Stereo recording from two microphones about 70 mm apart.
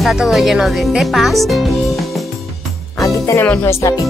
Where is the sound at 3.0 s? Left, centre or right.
Left.